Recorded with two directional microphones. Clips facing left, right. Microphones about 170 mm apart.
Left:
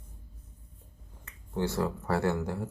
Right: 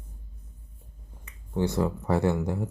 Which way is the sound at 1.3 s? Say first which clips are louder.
Right 4 dB; 15° right (ahead or behind).